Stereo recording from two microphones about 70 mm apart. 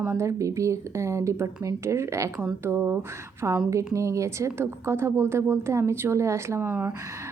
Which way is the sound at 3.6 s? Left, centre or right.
Right.